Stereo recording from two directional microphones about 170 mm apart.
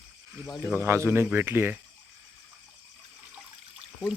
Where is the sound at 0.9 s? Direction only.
15° right (ahead or behind).